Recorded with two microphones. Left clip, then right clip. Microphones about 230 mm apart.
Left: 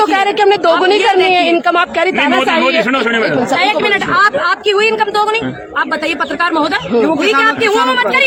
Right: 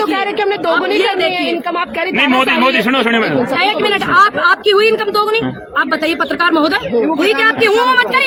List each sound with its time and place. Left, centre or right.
0.0 s a woman's voice: centre
2.9 s speech: right
3.6 s a woman's voice: centre
7.3 s a woman's voice: centre